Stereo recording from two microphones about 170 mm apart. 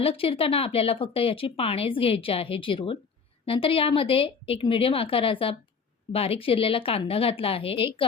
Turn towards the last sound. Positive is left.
turn(degrees=35)  # may be behind; listen again after turning